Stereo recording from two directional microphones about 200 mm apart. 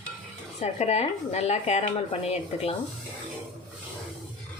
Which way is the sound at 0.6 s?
35° left (ahead or behind).